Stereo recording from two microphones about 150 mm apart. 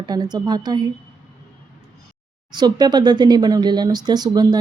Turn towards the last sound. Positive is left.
turn(degrees=-25)  # may be behind; listen again after turning